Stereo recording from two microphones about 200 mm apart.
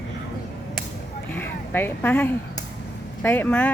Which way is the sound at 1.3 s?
10° left (ahead or behind).